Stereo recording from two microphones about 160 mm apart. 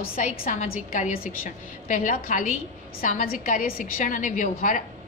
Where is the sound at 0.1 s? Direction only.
55° left (ahead or behind).